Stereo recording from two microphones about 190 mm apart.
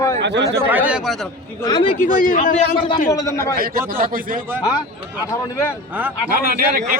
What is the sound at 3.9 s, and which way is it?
Speech, 45° right (ahead or behind).